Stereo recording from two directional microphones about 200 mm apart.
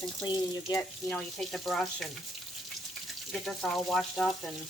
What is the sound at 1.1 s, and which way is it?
Speech, 5° left (ahead or behind).